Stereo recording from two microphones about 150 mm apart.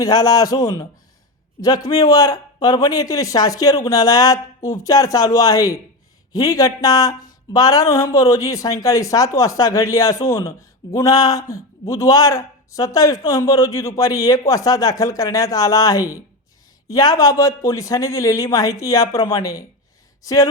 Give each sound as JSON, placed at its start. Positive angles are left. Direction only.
{"t": 0.0, "sound": "a man's voice", "side_deg": 25}